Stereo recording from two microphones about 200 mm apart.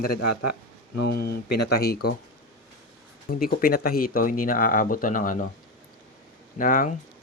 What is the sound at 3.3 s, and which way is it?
Speech, 45° left (ahead or behind).